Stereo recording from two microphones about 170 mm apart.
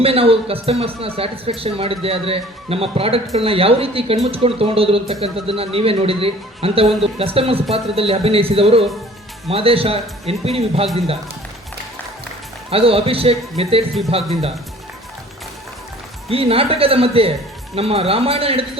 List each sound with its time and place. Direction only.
0.0 s speech: 35° right (ahead or behind)
12.7 s speech: 35° right (ahead or behind)
16.3 s speech: 35° right (ahead or behind)